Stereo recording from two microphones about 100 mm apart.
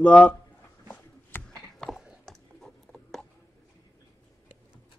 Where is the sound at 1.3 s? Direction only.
20° left (ahead or behind).